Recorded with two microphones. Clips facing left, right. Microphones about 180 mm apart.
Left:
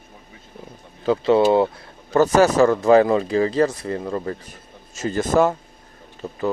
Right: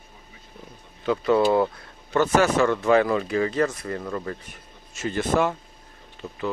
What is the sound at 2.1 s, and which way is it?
Speech, 40° left (ahead or behind).